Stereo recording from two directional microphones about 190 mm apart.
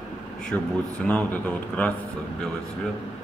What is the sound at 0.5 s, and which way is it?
A man's voice, 10° left (ahead or behind).